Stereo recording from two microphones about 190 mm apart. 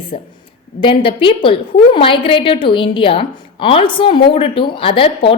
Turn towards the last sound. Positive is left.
turn(degrees=30)  # may be behind; listen again after turning